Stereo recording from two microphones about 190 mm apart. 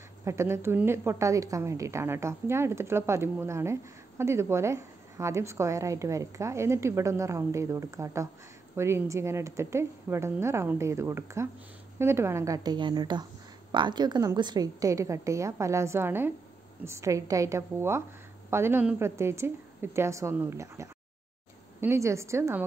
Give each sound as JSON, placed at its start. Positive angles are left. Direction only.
{"t": 0.2, "sound": "a woman's voice", "side_deg": -15}